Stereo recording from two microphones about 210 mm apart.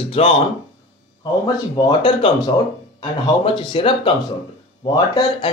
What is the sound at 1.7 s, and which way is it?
Speech, 25° left (ahead or behind).